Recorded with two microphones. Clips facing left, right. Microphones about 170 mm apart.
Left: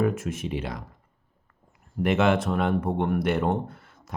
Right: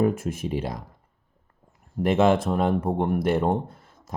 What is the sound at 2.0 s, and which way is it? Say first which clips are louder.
Speech: right 2 dB; 30° right (ahead or behind).